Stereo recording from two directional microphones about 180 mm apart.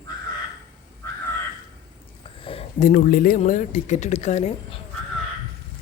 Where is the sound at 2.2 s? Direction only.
30° left (ahead or behind).